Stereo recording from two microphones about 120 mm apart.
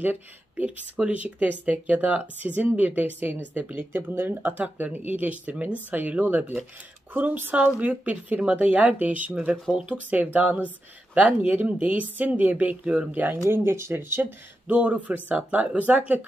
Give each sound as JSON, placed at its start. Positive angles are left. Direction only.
{"t": 0.0, "sound": "speech", "side_deg": -15}